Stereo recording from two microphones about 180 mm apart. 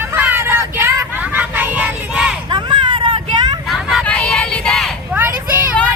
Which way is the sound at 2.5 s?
25° right (ahead or behind).